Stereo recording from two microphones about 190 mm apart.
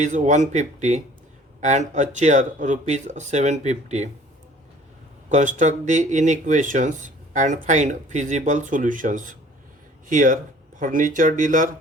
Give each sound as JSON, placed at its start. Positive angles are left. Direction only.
{"t": 0.0, "sound": "speech", "side_deg": -40}
{"t": 5.3, "sound": "speech", "side_deg": -40}